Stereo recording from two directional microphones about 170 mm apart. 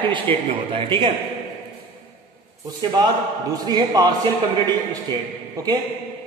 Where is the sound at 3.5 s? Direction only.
25° right (ahead or behind).